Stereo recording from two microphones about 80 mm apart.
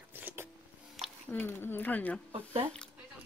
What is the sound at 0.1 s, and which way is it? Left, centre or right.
Vehicle, right.